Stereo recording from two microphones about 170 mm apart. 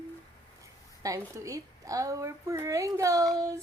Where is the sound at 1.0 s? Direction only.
20° right (ahead or behind).